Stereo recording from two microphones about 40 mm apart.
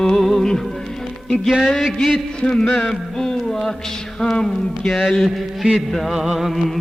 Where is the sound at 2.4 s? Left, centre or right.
Left.